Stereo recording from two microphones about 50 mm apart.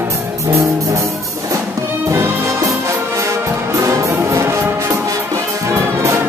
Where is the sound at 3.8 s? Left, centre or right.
Right.